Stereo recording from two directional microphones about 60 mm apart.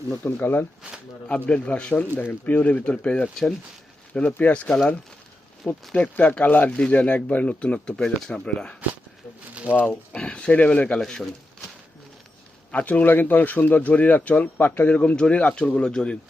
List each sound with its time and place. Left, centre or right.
0.3 s speech: left
1.3 s speech: centre
4.4 s speech: left
5.6 s speech: centre
6.1 s speech: left
9.8 s speech: centre
12.7 s speech: left